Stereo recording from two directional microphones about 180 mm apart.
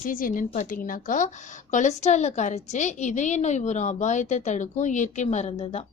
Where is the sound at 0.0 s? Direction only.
50° left (ahead or behind).